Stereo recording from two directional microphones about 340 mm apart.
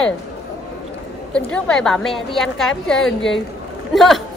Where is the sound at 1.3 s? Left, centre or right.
Centre.